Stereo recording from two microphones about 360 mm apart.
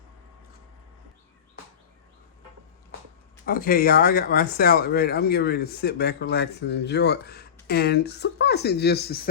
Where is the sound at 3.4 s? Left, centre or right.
Left.